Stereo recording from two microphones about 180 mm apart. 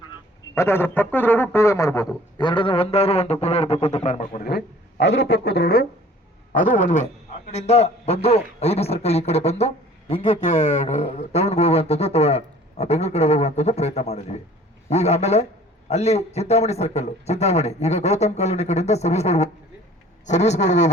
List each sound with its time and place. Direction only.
0.5 s a man's voice: 15° left (ahead or behind); by 4.4 s 40° left (ahead or behind)
4.4 s speech: 70° left (ahead or behind)
6.5 s a man's voice: 50° left (ahead or behind)